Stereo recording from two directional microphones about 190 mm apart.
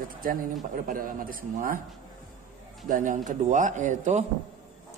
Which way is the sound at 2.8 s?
45° right (ahead or behind).